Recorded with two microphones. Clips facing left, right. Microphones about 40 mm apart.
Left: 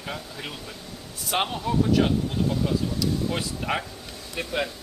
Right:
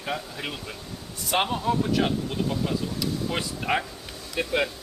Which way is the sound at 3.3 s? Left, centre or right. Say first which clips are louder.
Right 1 dB; centre.